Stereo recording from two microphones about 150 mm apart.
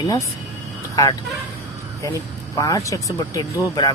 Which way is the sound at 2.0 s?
20° left (ahead or behind).